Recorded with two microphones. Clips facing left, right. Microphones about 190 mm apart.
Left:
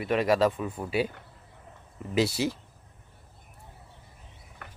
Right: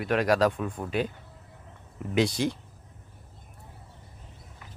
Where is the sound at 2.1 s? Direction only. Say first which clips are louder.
Right 1 dB; 5° left (ahead or behind).